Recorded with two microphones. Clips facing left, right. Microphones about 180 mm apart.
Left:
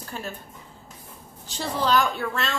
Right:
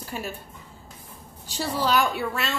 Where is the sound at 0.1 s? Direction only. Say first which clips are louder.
Right 2 dB; 10° right (ahead or behind).